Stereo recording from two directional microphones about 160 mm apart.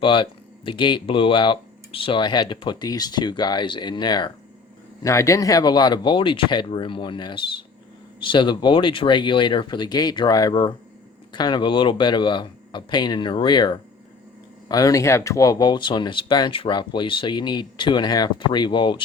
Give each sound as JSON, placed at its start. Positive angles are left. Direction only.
{"t": 0.0, "sound": "speech", "side_deg": 30}